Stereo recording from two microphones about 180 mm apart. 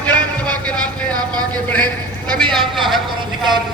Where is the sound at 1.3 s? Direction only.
20° right (ahead or behind).